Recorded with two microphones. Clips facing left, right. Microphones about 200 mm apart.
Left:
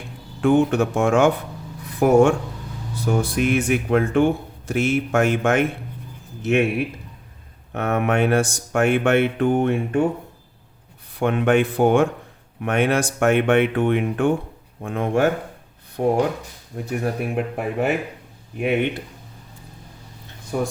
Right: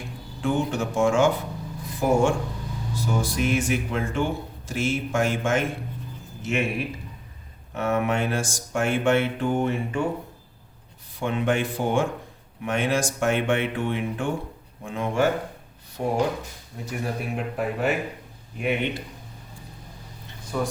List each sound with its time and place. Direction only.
0.4 s a man's voice: 60° left (ahead or behind)
7.7 s speech: 60° left (ahead or behind)
11.2 s speech: 60° left (ahead or behind)